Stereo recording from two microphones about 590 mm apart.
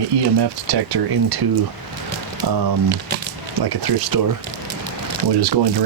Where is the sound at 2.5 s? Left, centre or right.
Right.